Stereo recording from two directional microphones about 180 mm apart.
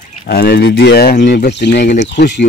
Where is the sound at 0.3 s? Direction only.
65° left (ahead or behind).